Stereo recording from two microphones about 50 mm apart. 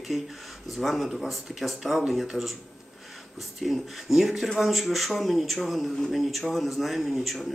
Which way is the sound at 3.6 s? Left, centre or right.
Centre.